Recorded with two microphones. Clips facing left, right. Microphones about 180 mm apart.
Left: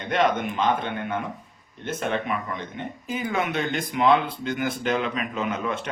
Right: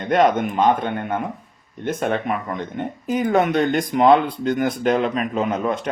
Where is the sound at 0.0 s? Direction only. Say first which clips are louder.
Right 6 dB; 45° right (ahead or behind).